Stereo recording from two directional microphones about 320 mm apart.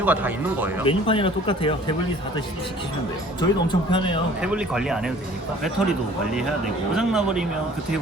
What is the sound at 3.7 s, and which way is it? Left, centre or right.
Speech, centre.